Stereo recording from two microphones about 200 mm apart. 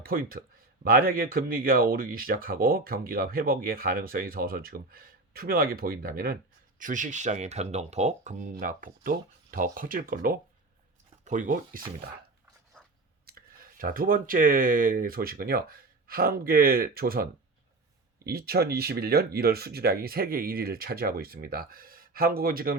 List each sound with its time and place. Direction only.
0.0 s speech: 45° right (ahead or behind)
13.2 s speech: 50° right (ahead or behind)